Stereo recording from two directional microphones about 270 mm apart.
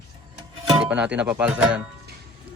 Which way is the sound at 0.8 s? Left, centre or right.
Centre.